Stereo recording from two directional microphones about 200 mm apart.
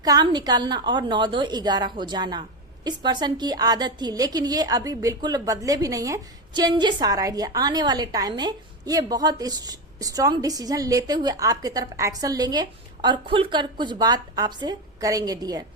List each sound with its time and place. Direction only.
0.0 s a woman's voice: 20° right (ahead or behind)